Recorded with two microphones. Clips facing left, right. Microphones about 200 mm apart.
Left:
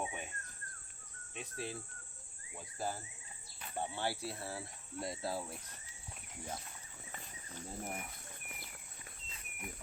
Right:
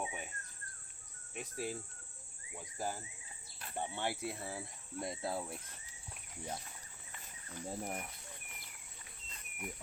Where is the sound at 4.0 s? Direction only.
15° right (ahead or behind).